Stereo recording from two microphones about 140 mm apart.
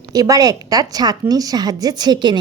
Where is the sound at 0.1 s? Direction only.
25° right (ahead or behind).